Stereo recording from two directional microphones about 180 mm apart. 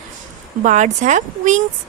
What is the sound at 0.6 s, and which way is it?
Speech, 40° right (ahead or behind).